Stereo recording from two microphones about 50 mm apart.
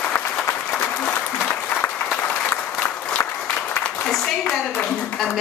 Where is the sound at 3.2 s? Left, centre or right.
Left.